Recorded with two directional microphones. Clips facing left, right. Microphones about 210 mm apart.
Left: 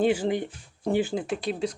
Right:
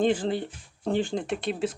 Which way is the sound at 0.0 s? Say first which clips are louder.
Left 1 dB; 10° left (ahead or behind).